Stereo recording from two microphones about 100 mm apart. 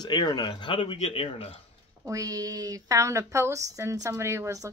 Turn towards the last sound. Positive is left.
turn(degrees=-30)  # may be behind; listen again after turning